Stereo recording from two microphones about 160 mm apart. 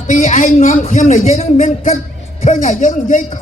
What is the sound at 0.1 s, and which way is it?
Speech, 50° left (ahead or behind).